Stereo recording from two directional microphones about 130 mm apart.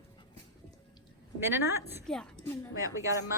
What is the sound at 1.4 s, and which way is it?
Speech, 20° right (ahead or behind).